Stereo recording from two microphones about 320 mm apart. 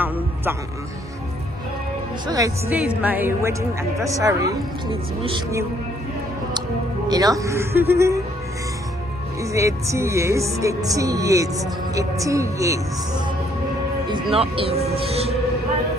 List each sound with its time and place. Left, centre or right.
2.2 s speech: centre
7.1 s speech: centre
9.4 s speech: centre
14.1 s speech: centre